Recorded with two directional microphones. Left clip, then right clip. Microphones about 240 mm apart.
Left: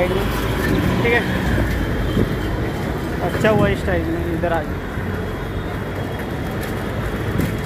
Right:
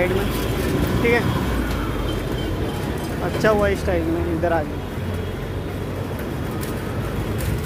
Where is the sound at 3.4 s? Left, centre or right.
Centre.